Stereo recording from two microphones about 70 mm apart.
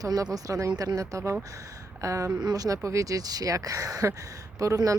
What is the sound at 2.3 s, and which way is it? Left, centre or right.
Speech, right.